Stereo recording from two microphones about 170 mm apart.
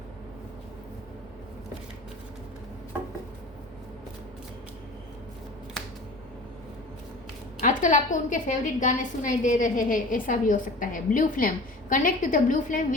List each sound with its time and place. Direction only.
7.6 s a woman's voice: 50° left (ahead or behind)